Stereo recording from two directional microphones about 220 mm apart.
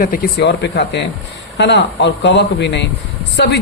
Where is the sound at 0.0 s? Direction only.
40° left (ahead or behind).